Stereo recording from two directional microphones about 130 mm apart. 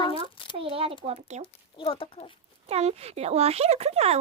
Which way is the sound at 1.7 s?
45° left (ahead or behind).